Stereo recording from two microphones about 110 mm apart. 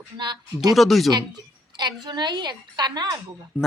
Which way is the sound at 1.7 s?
40° right (ahead or behind).